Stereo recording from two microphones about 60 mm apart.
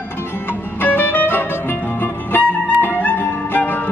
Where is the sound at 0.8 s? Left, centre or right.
Left.